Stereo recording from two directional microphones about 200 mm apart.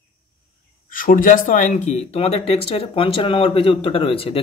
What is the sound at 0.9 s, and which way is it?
Speech, 45° left (ahead or behind).